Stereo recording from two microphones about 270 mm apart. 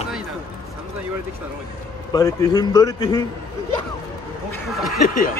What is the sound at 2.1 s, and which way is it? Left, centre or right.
A man's voice, centre.